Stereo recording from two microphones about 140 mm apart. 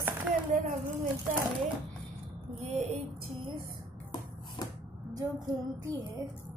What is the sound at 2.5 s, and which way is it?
Speech, 55° right (ahead or behind).